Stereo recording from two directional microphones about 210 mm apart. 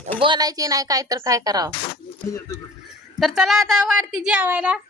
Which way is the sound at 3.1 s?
Centre (ahead or behind).